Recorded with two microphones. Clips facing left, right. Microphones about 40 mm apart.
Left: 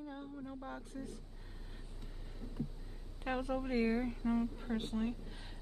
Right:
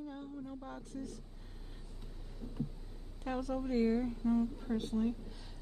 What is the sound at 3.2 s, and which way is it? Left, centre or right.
Speech, left.